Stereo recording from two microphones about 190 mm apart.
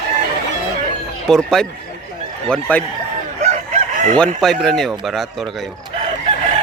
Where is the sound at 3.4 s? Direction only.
35° right (ahead or behind).